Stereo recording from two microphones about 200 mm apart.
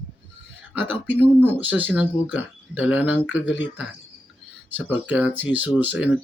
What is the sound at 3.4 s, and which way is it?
Speech, 65° left (ahead or behind).